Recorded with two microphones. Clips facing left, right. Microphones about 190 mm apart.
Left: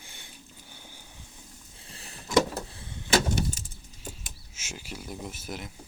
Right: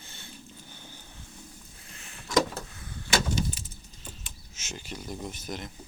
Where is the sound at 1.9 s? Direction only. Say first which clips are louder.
Left 3 dB; 35° left (ahead or behind).